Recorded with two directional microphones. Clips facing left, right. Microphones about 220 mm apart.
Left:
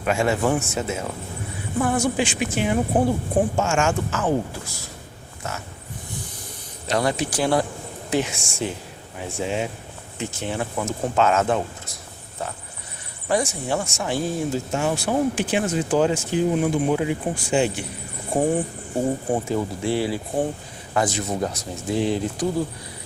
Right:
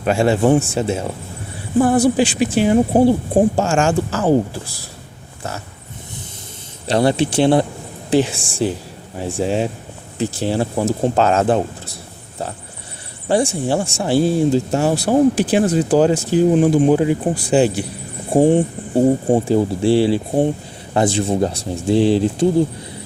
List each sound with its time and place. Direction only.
0.0 s speech: 30° right (ahead or behind)
6.8 s speech: 30° right (ahead or behind)
13.2 s speech: 30° right (ahead or behind)